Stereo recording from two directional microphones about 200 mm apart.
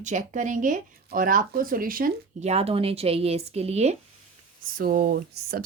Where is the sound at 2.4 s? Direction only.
30° right (ahead or behind).